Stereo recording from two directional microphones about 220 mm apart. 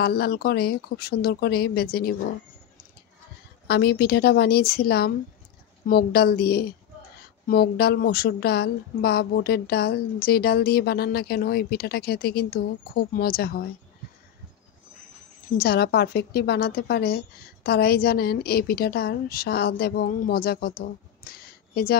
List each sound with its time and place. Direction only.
0.0 s speech: 45° left (ahead or behind)
3.6 s speech: 50° left (ahead or behind)
15.5 s speech: 45° left (ahead or behind)
21.2 s a sound: 45° left (ahead or behind)